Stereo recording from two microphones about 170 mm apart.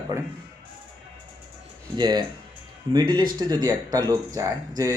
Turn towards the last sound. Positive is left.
turn(degrees=-20)  # may be behind; listen again after turning